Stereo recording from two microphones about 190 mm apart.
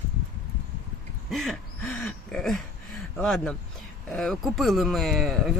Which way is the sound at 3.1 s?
5° left (ahead or behind).